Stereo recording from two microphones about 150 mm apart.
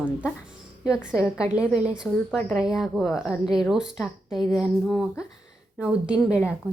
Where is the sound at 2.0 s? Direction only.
5° left (ahead or behind).